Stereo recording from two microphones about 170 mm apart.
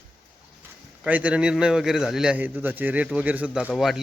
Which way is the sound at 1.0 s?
5° right (ahead or behind).